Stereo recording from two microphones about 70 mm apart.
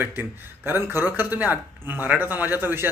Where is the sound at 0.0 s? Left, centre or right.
Right.